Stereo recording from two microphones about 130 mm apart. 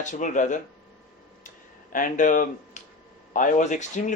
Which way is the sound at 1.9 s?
85° left.